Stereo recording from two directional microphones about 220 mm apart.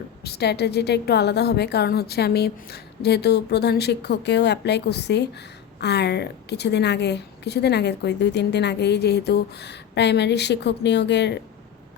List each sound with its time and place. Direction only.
0.2 s a woman's voice: 45° left (ahead or behind)